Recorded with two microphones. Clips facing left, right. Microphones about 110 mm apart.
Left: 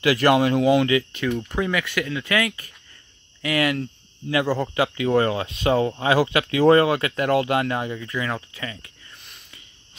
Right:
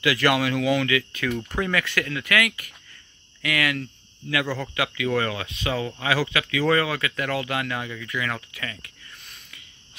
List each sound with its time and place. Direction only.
0.0 s speech: 35° left (ahead or behind)
1.5 s speech: 15° left (ahead or behind)